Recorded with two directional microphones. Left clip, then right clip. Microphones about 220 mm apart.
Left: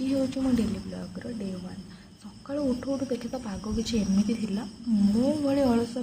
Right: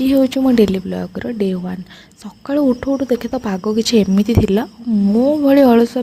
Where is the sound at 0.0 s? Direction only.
45° right (ahead or behind).